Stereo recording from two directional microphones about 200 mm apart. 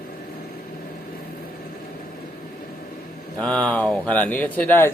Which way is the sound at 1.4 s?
45° left (ahead or behind).